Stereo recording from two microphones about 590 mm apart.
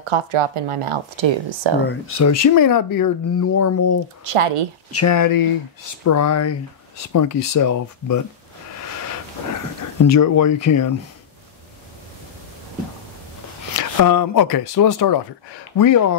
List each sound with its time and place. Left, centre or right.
0.0 s speech: right
1.9 s speech: left
4.2 s speech: right
4.9 s speech: left
10.0 s speech: left
13.7 s speech: left